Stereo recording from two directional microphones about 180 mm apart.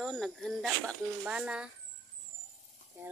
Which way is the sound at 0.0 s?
Centre (ahead or behind).